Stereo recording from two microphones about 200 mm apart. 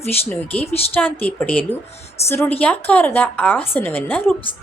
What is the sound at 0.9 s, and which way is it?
A woman's voice, 10° left (ahead or behind).